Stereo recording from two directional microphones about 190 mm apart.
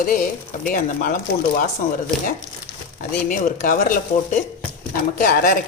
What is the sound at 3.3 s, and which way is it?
Speech, 45° left (ahead or behind).